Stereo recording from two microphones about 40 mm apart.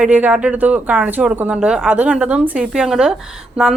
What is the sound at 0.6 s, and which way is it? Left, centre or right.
Speech, right.